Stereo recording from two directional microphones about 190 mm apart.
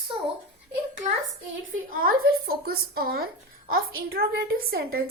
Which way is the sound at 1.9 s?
50° right (ahead or behind).